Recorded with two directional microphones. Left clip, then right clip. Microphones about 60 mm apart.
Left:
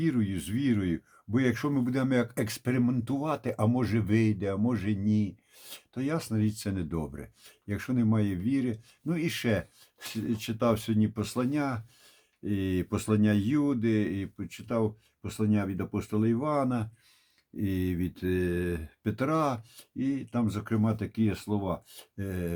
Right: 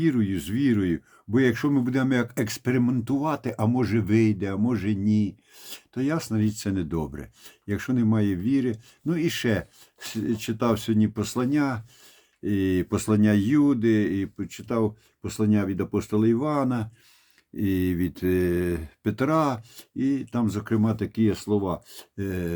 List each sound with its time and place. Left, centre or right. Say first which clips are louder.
0.0 s speech: right 6 dB; right
17.6 s speech: right 6 dB; right
19.0 s speech: right 5 dB; right